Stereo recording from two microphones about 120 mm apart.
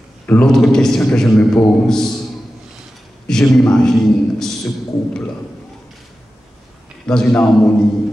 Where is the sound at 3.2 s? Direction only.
5° left (ahead or behind).